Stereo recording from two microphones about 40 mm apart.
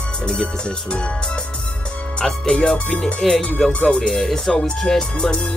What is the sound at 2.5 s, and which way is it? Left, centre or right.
Speech, left.